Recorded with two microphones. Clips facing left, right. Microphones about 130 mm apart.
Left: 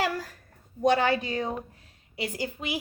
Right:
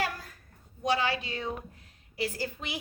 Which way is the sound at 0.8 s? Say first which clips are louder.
Left 6 dB; 55° left (ahead or behind).